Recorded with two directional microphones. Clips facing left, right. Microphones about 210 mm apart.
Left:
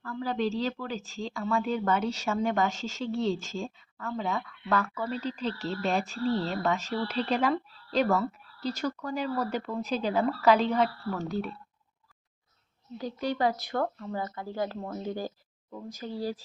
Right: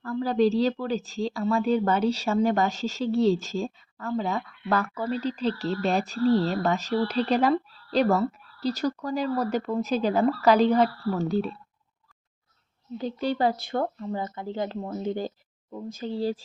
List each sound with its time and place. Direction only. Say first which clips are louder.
0.0 s a woman's voice: right 7 dB; 40° right (ahead or behind)
11.3 s speech: right 6 dB; 25° right (ahead or behind)
13.0 s speech: right 3 dB; 30° right (ahead or behind)